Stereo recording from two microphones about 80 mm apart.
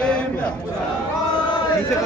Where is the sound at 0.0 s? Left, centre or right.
Centre.